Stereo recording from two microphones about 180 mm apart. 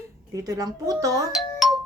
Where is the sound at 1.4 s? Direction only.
Centre (ahead or behind).